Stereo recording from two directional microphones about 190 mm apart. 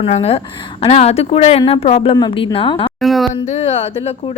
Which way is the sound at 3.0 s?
Centre (ahead or behind).